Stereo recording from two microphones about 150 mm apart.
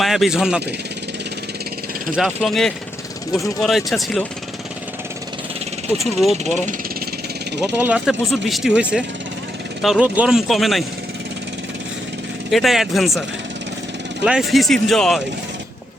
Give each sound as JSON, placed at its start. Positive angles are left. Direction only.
{"t": 0.0, "sound": "speech", "side_deg": 0}
{"t": 2.1, "sound": "speech", "side_deg": 0}
{"t": 6.3, "sound": "speech", "side_deg": -50}
{"t": 7.8, "sound": "speech", "side_deg": -10}
{"t": 12.5, "sound": "speech", "side_deg": 0}
{"t": 14.3, "sound": "speech", "side_deg": 0}